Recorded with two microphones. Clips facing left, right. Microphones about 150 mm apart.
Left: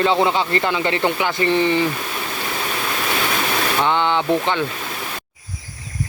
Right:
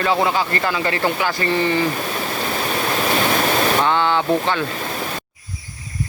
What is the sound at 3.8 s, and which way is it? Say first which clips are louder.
Speech: right 1 dB; 20° left (ahead or behind).